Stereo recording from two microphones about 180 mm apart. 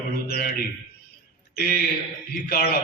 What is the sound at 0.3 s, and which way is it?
Speech, 55° left (ahead or behind).